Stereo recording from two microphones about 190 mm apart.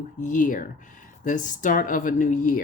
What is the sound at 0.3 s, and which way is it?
Speech, 45° left (ahead or behind).